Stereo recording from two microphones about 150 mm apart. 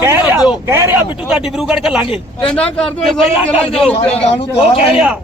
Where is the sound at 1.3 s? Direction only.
Centre (ahead or behind).